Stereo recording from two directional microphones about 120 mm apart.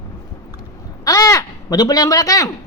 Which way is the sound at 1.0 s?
25° left (ahead or behind).